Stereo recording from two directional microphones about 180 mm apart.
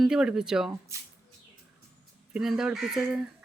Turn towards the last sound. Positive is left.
turn(degrees=-5)  # may be behind; listen again after turning